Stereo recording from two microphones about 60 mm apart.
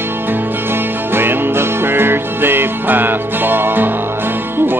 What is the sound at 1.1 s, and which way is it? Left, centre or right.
Music, right.